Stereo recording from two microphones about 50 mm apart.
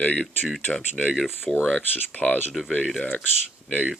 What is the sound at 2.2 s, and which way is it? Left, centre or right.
Speech, left.